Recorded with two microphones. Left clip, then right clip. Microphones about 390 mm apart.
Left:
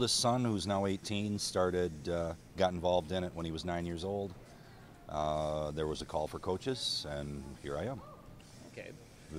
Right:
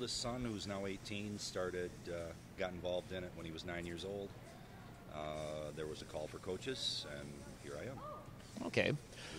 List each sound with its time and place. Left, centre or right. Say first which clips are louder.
0.0 s speech: left 11 dB; left